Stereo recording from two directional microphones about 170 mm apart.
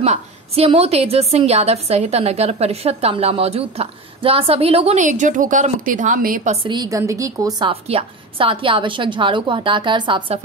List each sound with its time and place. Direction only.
0.0 s a woman's voice: 40° right (ahead or behind); by 6.5 s 55° right (ahead or behind)
6.5 s a woman's voice: 30° right (ahead or behind)
7.9 s a woman's voice: 30° right (ahead or behind)